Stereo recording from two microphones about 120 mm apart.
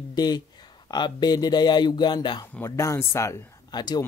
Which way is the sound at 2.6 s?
25° left (ahead or behind).